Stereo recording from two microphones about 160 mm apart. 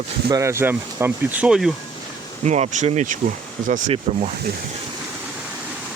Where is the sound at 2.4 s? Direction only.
45° right (ahead or behind).